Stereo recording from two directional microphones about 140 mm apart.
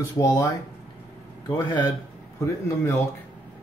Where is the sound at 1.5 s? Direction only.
30° left (ahead or behind).